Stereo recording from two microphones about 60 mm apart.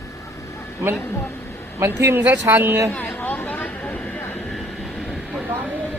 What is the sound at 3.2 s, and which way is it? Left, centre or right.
Vehicle, left.